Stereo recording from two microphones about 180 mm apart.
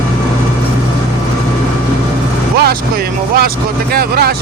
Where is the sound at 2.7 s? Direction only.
55° right (ahead or behind).